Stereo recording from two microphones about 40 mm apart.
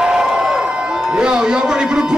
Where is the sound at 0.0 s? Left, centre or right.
Centre.